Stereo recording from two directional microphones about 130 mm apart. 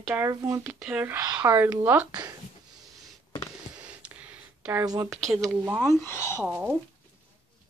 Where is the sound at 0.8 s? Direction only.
10° right (ahead or behind).